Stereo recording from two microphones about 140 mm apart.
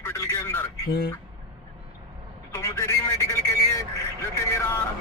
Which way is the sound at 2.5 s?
20° left (ahead or behind).